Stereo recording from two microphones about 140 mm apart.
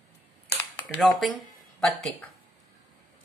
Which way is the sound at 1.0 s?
Centre (ahead or behind).